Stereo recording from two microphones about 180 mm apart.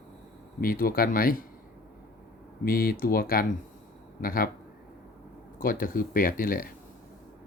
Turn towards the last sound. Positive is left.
turn(degrees=50)  # may be behind; listen again after turning